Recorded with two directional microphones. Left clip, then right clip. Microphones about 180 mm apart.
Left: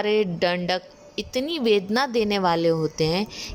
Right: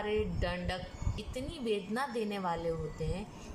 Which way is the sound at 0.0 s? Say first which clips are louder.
Left 13 dB; 55° left (ahead or behind).